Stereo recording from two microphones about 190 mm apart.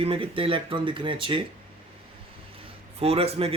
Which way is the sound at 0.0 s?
30° right (ahead or behind).